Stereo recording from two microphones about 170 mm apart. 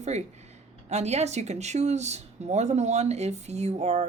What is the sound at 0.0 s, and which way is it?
Speech, 40° right (ahead or behind).